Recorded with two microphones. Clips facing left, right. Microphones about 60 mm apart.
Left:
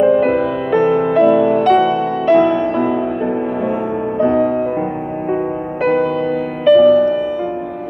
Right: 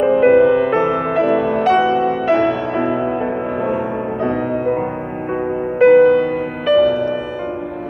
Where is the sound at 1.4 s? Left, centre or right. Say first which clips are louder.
Left 3 dB; centre.